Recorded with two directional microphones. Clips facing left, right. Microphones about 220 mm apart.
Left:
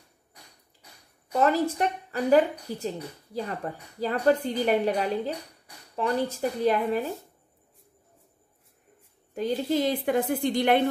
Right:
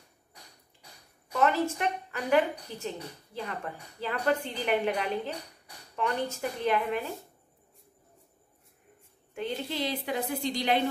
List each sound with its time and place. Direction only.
1.3 s a woman's voice: 35° left (ahead or behind)
9.3 s a woman's voice: 40° left (ahead or behind)